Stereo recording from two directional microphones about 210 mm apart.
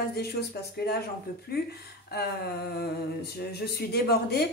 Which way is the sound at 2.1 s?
50° left (ahead or behind).